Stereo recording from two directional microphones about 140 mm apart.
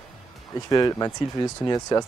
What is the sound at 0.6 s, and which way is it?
Speech, 25° left (ahead or behind).